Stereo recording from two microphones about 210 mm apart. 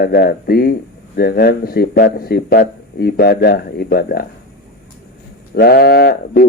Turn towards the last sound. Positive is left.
turn(degrees=45)  # may be behind; listen again after turning